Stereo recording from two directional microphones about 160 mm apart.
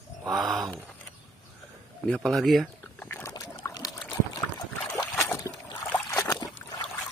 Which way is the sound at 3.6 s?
25° left (ahead or behind).